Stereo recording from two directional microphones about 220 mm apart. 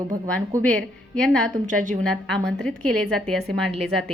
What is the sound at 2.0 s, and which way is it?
A woman's voice, 5° left (ahead or behind).